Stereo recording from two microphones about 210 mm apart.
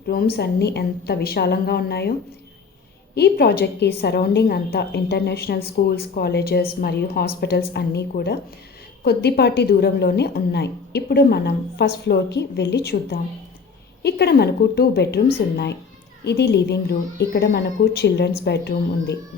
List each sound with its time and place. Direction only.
0.1 s a woman's voice: 45° left (ahead or behind)
3.2 s a woman's voice: 50° left (ahead or behind)
16.2 s a woman's voice: 50° left (ahead or behind)